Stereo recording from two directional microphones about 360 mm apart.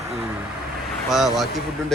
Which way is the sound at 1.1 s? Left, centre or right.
Centre.